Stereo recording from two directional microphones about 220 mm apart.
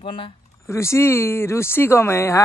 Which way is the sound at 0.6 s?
10° left (ahead or behind).